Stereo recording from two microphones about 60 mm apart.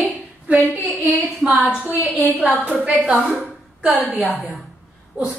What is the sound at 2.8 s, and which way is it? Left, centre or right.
Speech, right.